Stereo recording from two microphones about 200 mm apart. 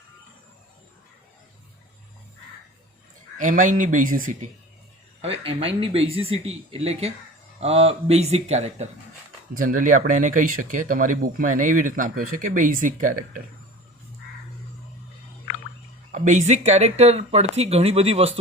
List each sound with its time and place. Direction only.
3.3 s speech: 40° right (ahead or behind)
5.2 s speech: 30° right (ahead or behind)
16.1 s speech: 40° right (ahead or behind)